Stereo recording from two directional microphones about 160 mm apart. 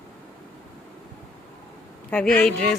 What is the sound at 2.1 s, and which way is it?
Speech, 5° left (ahead or behind).